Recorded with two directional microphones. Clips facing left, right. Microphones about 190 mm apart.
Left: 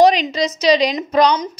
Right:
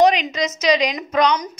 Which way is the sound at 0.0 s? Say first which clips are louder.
Left 3 dB; 35° left (ahead or behind).